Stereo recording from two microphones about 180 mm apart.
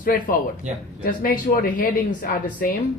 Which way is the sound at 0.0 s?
50° left (ahead or behind).